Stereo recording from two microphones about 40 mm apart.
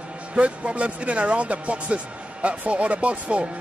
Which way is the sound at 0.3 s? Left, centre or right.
Right.